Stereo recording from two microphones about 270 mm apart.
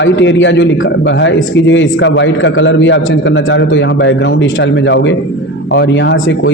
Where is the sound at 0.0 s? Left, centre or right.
Left.